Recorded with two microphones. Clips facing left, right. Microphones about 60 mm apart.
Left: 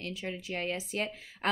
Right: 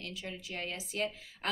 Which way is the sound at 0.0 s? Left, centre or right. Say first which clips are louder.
Left 5 dB; left.